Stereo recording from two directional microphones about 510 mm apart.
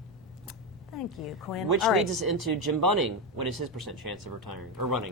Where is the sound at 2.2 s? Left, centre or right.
Right.